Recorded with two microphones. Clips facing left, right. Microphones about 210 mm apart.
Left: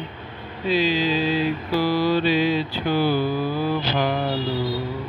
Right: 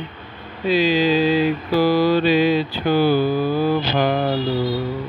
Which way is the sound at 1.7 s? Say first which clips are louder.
Right 4 dB; 40° right (ahead or behind).